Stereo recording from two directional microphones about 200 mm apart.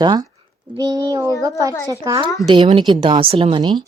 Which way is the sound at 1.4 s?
15° right (ahead or behind).